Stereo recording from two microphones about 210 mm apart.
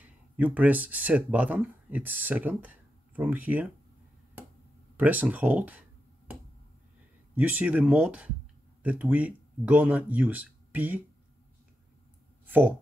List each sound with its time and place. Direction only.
0.0 s speech: 5° right (ahead or behind)
4.9 s speech: 10° right (ahead or behind)
7.3 s speech: 5° right (ahead or behind)
12.4 s speech: 10° right (ahead or behind)